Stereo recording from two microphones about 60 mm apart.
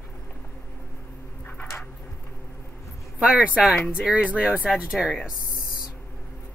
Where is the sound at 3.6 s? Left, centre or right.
Centre.